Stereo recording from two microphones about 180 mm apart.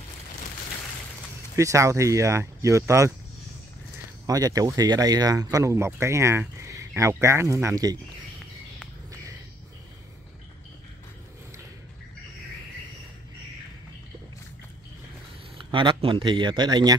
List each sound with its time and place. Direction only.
1.6 s speech: 15° right (ahead or behind)
4.3 s speech: 20° right (ahead or behind)
15.5 s a man's voice: 25° right (ahead or behind)